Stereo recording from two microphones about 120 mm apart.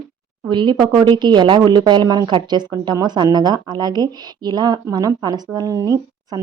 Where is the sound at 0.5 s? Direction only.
40° right (ahead or behind).